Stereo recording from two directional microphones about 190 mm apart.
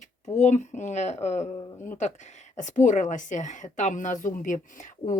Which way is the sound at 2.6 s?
40° left (ahead or behind).